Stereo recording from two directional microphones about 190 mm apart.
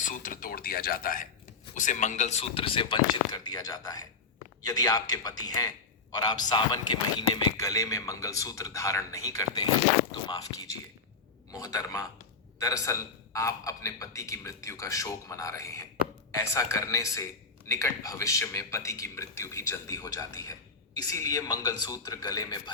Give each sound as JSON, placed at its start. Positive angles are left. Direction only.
{"t": 0.0, "sound": "speech", "side_deg": 45}